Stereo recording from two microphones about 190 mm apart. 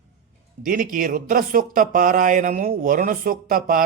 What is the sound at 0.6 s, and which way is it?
Speech, 45° right (ahead or behind).